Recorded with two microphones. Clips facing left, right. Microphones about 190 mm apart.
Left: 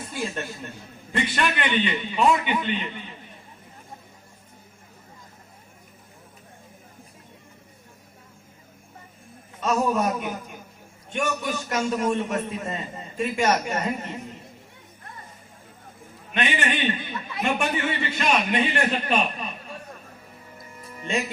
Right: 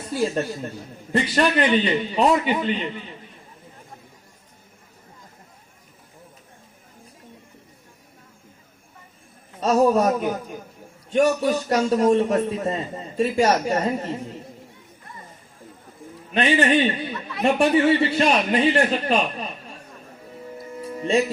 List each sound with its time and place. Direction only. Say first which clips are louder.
0.1 s a man's voice: right 9 dB; 35° right (ahead or behind)
9.6 s a man's voice: right 6 dB; 35° right (ahead or behind)
16.3 s a man's voice: right 7 dB; 35° right (ahead or behind)